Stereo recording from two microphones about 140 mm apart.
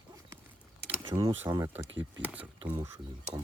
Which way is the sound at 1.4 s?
20° right (ahead or behind).